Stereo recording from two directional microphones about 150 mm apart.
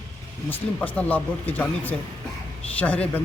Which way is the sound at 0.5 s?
10° left (ahead or behind).